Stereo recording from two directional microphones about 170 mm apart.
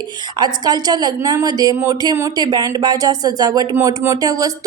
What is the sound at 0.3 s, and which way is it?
Speech, 25° right (ahead or behind).